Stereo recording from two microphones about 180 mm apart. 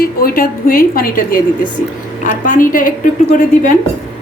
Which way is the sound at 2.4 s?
45° left (ahead or behind).